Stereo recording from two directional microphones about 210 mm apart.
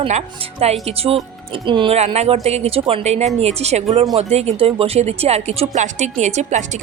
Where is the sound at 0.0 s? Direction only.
30° right (ahead or behind).